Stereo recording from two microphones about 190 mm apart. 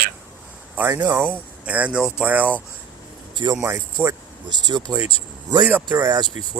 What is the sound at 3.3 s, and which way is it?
Speech, 20° right (ahead or behind).